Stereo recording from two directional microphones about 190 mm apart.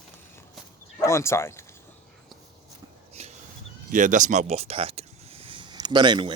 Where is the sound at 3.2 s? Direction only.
35° right (ahead or behind).